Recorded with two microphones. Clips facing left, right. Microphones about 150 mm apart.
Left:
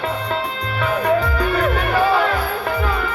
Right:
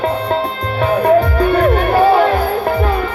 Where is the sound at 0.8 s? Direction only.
35° right (ahead or behind).